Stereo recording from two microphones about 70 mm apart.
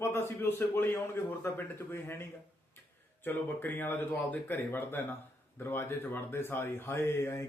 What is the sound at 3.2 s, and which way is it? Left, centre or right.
Speech, left.